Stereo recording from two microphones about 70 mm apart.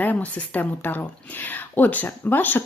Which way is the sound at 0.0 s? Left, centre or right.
Left.